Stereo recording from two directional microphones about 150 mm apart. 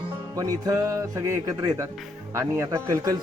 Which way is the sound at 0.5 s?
25° right (ahead or behind).